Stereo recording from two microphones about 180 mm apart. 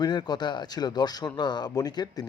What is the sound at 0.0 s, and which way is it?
A man's voice, 25° left (ahead or behind).